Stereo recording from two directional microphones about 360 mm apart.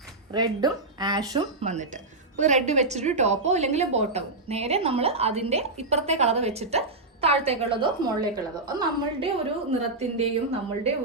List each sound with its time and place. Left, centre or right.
0.3 s a woman's voice: centre